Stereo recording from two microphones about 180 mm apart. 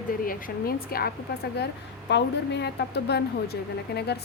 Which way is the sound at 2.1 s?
70° left (ahead or behind).